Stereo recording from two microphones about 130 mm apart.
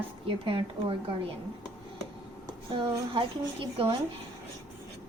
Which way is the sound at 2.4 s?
30° right (ahead or behind).